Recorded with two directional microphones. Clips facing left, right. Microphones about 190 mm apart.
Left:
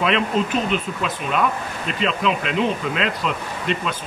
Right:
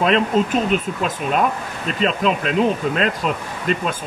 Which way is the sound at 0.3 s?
45° right (ahead or behind).